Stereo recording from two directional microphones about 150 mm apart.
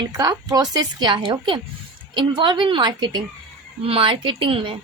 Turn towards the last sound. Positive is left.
turn(degrees=-35)  # may be behind; listen again after turning